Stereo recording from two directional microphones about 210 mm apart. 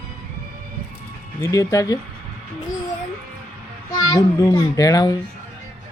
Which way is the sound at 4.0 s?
15° left (ahead or behind).